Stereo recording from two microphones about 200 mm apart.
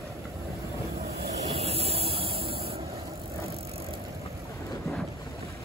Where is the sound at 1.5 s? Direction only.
30° right (ahead or behind).